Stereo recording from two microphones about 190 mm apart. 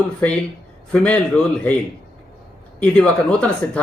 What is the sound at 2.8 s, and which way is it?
Speech, 5° left (ahead or behind).